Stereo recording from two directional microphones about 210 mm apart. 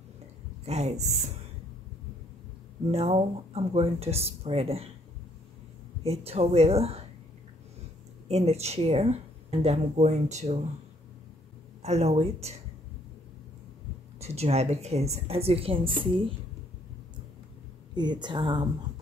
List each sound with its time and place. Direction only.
0.7 s speech: 30° right (ahead or behind)
2.9 s a woman's voice: 30° right (ahead or behind)
6.0 s a woman's voice: 30° right (ahead or behind)
8.3 s speech: 30° right (ahead or behind)
11.8 s speech: 30° right (ahead or behind)
14.2 s a woman's voice: 30° right (ahead or behind)
17.9 s a woman's voice: 20° right (ahead or behind)